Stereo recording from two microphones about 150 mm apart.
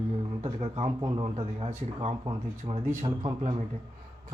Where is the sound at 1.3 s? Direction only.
40° right (ahead or behind).